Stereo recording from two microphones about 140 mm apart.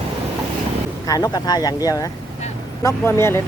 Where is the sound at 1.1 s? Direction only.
30° left (ahead or behind).